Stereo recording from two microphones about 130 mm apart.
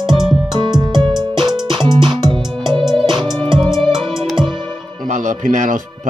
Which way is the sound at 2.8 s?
Centre (ahead or behind).